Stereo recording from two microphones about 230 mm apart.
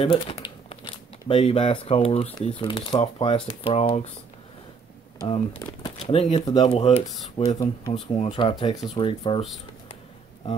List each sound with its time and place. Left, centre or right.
0.0 s crumpling: left
1.2 s speech: left
5.3 s speech: centre